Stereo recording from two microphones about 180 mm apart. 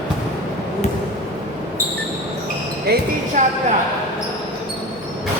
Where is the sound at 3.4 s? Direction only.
40° right (ahead or behind).